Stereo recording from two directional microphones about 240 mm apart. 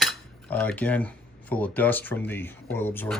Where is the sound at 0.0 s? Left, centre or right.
Centre.